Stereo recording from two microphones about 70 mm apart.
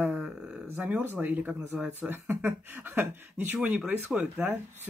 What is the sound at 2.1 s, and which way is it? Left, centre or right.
Speech, right.